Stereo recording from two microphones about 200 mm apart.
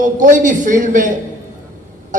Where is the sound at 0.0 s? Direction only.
40° right (ahead or behind).